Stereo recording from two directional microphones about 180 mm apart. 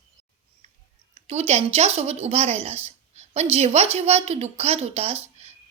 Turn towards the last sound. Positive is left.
turn(degrees=-35)  # may be behind; listen again after turning